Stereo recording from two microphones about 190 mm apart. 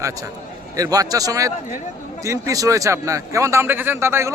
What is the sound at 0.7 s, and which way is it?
A man's voice, 20° right (ahead or behind).